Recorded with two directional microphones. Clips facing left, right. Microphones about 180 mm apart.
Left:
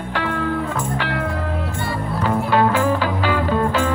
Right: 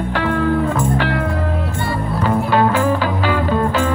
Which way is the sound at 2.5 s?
45° right (ahead or behind).